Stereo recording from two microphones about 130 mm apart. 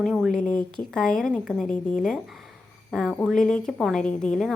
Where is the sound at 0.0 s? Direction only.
Centre (ahead or behind).